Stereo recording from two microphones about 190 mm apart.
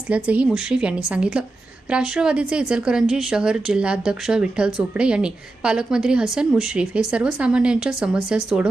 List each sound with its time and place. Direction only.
0.3 s a woman's voice: 5° right (ahead or behind)